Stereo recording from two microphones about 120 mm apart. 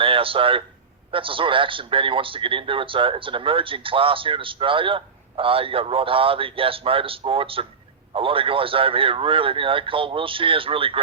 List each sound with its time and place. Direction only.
0.0 s speech: 50° right (ahead or behind)